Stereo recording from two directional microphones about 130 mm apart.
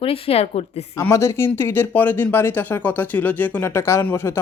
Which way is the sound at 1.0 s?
20° left (ahead or behind).